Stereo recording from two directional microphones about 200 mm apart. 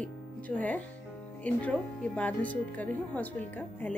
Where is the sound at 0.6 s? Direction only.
5° left (ahead or behind).